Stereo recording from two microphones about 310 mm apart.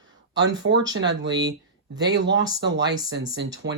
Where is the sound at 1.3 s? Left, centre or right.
Centre.